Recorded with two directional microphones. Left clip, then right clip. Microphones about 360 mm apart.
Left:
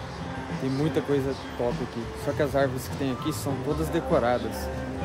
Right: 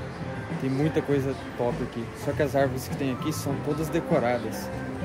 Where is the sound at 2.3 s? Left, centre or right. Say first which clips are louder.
Right 1 dB; centre.